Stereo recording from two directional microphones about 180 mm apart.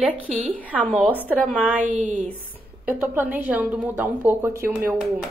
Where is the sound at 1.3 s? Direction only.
5° right (ahead or behind).